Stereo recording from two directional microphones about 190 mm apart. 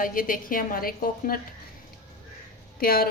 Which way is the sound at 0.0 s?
45° left (ahead or behind).